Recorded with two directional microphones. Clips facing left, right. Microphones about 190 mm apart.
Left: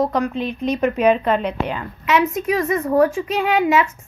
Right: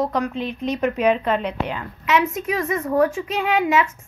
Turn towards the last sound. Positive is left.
turn(degrees=40)  # may be behind; listen again after turning